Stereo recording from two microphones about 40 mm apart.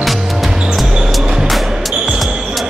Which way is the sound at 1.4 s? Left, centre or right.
Centre.